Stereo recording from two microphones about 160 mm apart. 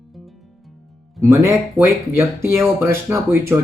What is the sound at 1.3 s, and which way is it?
Speech, 20° right (ahead or behind).